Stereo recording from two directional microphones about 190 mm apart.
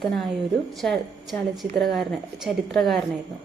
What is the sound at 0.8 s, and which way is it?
A woman's voice, centre (ahead or behind).